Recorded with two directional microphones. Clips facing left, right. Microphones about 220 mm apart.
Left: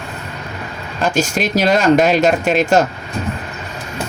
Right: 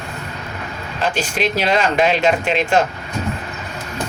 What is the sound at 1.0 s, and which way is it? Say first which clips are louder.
Speech: left 3 dB; 45° left (ahead or behind).